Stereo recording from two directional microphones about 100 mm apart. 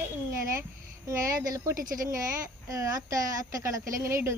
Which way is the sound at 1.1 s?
30° right (ahead or behind).